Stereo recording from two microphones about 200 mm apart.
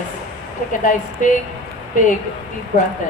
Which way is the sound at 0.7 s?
40° left (ahead or behind).